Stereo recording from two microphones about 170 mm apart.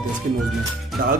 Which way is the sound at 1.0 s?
55° right (ahead or behind).